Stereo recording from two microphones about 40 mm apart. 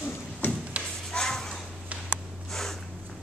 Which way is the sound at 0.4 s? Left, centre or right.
Left.